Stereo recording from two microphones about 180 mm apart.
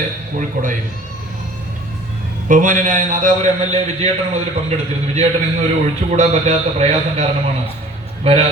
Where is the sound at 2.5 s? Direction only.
45° right (ahead or behind).